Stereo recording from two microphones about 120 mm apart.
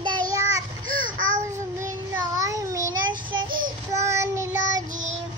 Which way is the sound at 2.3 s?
30° right (ahead or behind).